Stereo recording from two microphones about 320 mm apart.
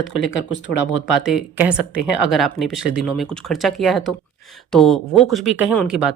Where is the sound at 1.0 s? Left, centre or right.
Centre.